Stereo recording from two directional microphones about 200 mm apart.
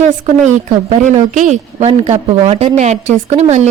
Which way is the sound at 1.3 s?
35° right (ahead or behind).